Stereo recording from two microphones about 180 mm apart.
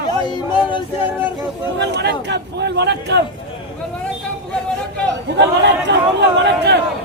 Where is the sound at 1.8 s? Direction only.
70° right (ahead or behind).